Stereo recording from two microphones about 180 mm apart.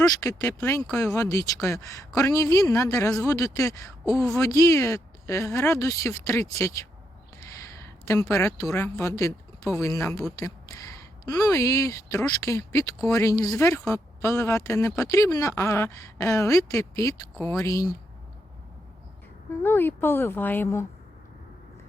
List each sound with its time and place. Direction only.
0.2 s speech: 15° left (ahead or behind)
19.6 s speech: 10° left (ahead or behind)